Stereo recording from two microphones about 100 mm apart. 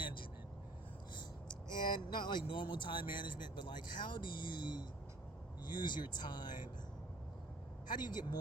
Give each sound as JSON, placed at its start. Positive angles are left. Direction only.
{"t": 0.0, "sound": "vehicle", "side_deg": 55}
{"t": 1.1, "sound": "speech", "side_deg": 45}
{"t": 7.9, "sound": "speech", "side_deg": 45}